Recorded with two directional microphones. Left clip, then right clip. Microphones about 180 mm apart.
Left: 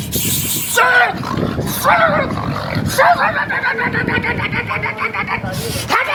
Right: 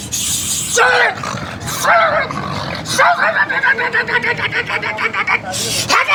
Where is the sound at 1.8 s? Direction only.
10° right (ahead or behind).